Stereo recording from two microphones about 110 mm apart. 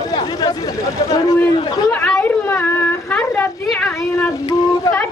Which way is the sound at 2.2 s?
20° left (ahead or behind).